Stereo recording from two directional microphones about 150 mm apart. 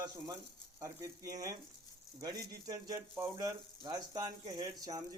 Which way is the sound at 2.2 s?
25° right (ahead or behind).